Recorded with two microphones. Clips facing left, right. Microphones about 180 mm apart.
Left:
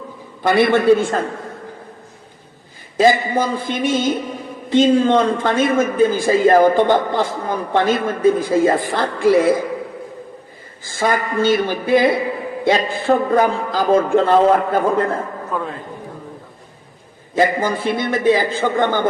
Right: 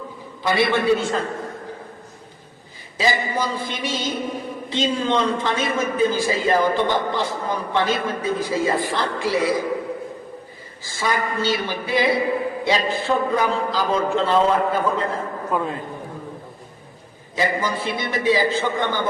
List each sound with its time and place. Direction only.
0.4 s a man's voice: 50° left (ahead or behind)
3.0 s a man's voice: 50° left (ahead or behind)
10.8 s a man's voice: 50° left (ahead or behind)
15.5 s a man's voice: 15° right (ahead or behind)
17.3 s a man's voice: 50° left (ahead or behind)